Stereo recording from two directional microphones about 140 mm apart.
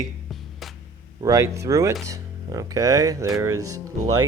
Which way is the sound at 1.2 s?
25° right (ahead or behind).